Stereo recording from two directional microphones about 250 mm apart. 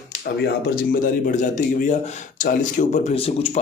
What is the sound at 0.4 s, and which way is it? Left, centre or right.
Speech, left.